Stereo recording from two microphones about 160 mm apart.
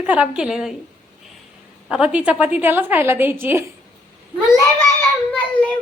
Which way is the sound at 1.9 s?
5° right (ahead or behind).